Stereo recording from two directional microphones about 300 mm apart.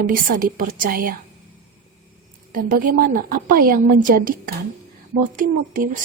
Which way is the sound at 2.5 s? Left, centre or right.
Right.